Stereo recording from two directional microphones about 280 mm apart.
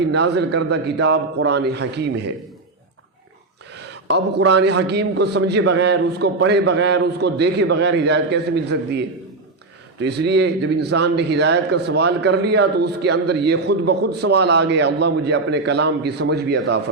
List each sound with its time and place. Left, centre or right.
0.1 s a man's voice: right
3.8 s a sound: right
4.4 s a man's voice: right